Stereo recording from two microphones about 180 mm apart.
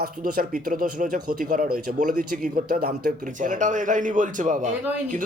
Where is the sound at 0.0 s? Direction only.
50° right (ahead or behind).